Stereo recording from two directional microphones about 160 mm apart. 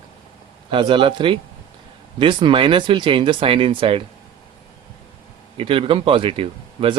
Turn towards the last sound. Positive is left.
turn(degrees=-35)  # may be behind; listen again after turning